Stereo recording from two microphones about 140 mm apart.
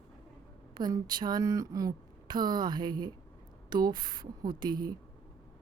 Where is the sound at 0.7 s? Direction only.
30° right (ahead or behind).